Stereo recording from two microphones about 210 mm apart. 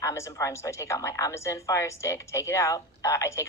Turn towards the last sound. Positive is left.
turn(degrees=15)  # may be behind; listen again after turning